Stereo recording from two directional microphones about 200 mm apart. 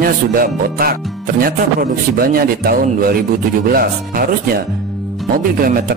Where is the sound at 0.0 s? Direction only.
45° right (ahead or behind).